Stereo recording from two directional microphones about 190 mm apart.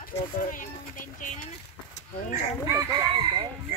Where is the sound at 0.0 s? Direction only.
45° left (ahead or behind).